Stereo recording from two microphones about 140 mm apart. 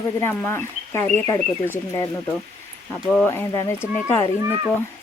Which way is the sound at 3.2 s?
20° left (ahead or behind).